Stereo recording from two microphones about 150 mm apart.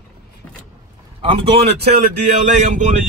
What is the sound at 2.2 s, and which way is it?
Speech, 55° right (ahead or behind).